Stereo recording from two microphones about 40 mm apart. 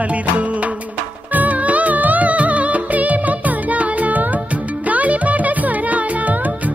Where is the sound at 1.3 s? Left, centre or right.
Right.